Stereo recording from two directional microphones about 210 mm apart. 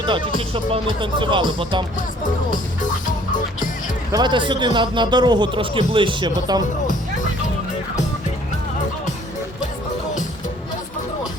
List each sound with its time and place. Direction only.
0.0 s a man's voice: 25° right (ahead or behind)
4.1 s a man's voice: 20° right (ahead or behind)